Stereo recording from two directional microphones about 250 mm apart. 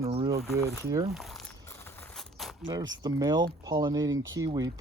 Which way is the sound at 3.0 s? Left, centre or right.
Centre.